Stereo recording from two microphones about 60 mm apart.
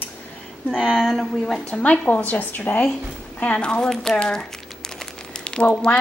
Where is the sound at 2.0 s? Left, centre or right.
Left; by 4.2 s centre.